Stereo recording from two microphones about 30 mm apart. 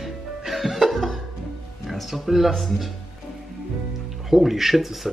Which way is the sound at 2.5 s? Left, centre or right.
Centre.